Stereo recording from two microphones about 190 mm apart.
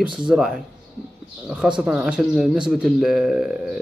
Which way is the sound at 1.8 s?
5° right (ahead or behind).